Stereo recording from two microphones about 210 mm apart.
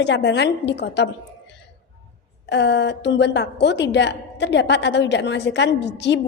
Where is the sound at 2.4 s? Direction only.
55° left (ahead or behind).